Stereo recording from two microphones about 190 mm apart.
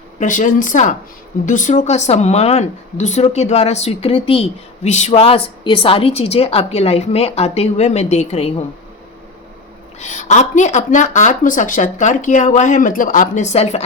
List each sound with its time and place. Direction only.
0.2 s speech: 40° left (ahead or behind)
10.0 s speech: 40° left (ahead or behind)